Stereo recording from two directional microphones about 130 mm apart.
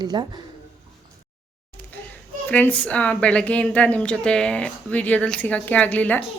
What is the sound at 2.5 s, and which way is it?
A woman's voice, 10° left (ahead or behind).